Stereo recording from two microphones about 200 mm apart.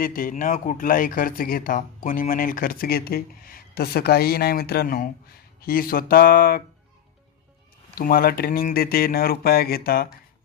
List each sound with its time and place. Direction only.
0.0 s speech: 45° left (ahead or behind)
7.9 s speech: 45° left (ahead or behind)